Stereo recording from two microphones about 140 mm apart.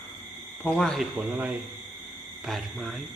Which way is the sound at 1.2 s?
10° right (ahead or behind).